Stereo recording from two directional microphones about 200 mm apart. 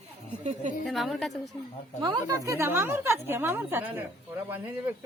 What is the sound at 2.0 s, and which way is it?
A woman's voice, 15° right (ahead or behind).